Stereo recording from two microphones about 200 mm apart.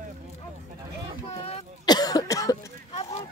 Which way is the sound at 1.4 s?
20° left (ahead or behind).